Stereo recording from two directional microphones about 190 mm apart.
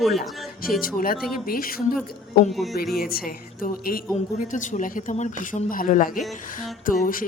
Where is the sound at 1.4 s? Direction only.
50° left (ahead or behind).